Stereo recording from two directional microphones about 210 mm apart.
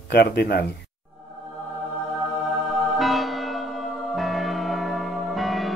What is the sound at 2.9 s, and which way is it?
Church bell, centre (ahead or behind).